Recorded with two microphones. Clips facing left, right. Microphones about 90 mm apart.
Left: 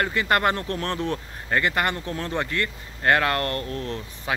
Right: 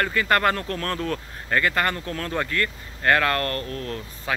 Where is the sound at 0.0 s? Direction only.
25° left (ahead or behind).